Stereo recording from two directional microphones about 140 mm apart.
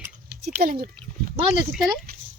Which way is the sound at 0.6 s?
90° right.